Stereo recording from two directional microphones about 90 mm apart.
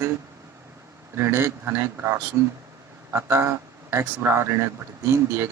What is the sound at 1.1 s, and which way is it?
Speech, 30° right (ahead or behind).